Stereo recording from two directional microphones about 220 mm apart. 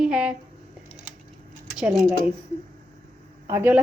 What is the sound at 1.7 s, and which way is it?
Speech, 5° right (ahead or behind).